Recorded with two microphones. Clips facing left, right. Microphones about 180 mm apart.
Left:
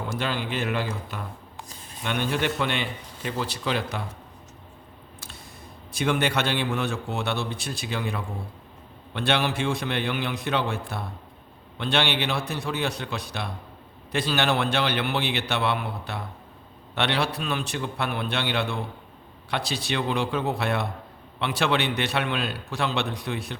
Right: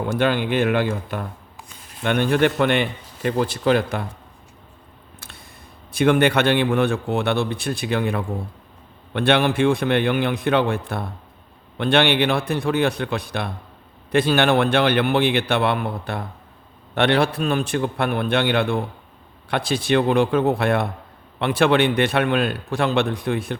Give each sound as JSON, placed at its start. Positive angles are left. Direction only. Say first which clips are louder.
{"t": 0.1, "sound": "a man's voice", "louder": "right 10 dB", "side_deg": -60}
{"t": 5.9, "sound": "a man's voice", "louder": "right 8 dB", "side_deg": -55}